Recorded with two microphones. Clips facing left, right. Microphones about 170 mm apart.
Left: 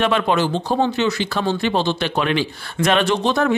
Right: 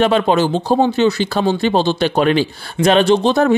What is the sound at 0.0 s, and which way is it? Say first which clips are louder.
Speech: right 4 dB; 35° right (ahead or behind).